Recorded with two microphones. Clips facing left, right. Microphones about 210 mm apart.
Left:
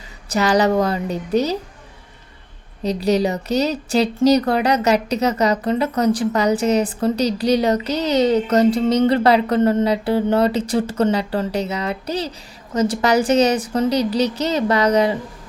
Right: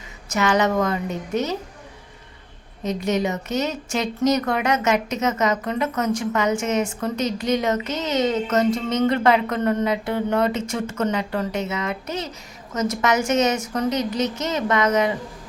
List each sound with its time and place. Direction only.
0.3 s a woman's voice: 35° left (ahead or behind)
2.8 s a woman's voice: 35° left (ahead or behind)